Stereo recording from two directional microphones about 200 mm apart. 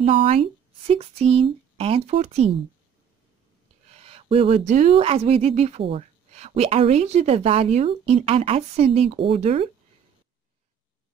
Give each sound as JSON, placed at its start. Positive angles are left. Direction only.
{"t": 0.0, "sound": "speech", "side_deg": -30}
{"t": 3.9, "sound": "speech", "side_deg": -30}